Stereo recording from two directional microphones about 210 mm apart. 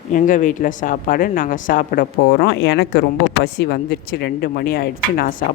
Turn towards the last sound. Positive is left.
turn(degrees=40)  # may be behind; listen again after turning